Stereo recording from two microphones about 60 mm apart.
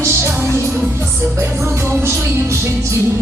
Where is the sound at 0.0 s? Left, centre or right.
Right.